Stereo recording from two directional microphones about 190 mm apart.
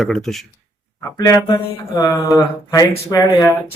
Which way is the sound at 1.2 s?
20° left (ahead or behind).